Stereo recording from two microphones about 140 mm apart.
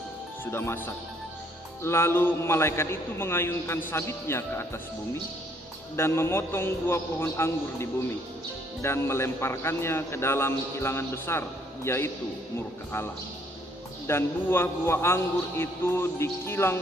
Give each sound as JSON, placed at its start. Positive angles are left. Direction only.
{"t": 0.5, "sound": "a man's voice", "side_deg": 20}
{"t": 6.0, "sound": "a man's voice", "side_deg": 15}
{"t": 14.1, "sound": "a man's voice", "side_deg": 15}